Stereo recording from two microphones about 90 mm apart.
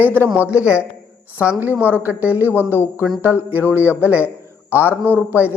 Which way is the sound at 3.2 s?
20° right (ahead or behind).